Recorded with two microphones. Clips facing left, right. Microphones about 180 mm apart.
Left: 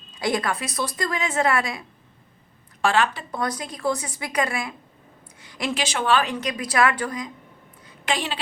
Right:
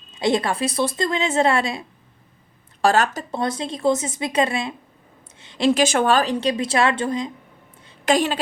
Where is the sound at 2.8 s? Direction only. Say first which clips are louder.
Right 3 dB; 40° right (ahead or behind).